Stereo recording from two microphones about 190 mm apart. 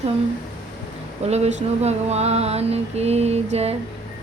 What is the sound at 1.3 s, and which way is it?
Speech, 35° right (ahead or behind).